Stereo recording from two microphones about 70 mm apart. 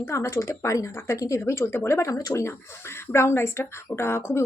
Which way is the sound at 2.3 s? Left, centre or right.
Left.